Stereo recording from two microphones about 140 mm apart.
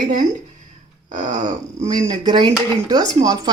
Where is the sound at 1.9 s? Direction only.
30° right (ahead or behind).